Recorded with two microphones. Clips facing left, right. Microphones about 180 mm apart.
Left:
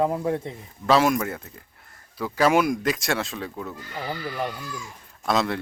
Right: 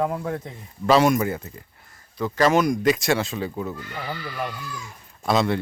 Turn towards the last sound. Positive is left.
turn(degrees=0)  # may be behind; listen again after turning